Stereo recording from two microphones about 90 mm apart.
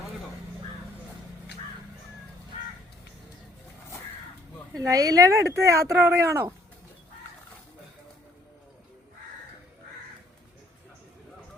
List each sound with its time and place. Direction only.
4.8 s speech: 40° right (ahead or behind)